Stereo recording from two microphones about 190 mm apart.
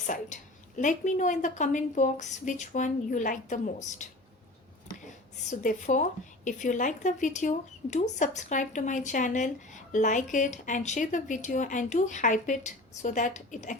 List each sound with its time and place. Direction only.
0.8 s a woman's voice: 40° left (ahead or behind)
5.5 s a woman's voice: 40° left (ahead or behind)